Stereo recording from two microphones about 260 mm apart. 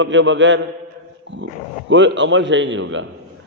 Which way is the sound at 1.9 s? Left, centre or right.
Right.